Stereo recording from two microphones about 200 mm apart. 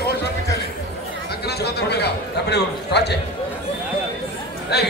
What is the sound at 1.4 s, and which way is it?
A man's voice, 55° left (ahead or behind).